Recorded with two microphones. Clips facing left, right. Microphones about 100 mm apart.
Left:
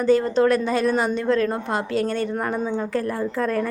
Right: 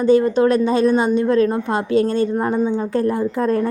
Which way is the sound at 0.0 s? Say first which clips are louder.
Right 4 dB; 20° right (ahead or behind).